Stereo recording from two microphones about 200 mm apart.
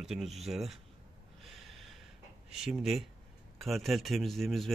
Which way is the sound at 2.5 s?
Centre (ahead or behind).